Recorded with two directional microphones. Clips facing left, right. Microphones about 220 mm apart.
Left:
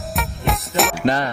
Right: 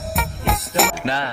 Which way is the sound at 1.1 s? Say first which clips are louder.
Left 5 dB; 45° left (ahead or behind).